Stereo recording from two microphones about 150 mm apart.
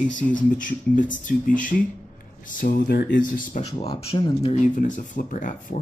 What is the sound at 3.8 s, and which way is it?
Speech, 40° left (ahead or behind).